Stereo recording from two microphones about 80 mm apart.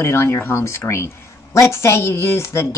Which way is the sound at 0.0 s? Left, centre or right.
Left.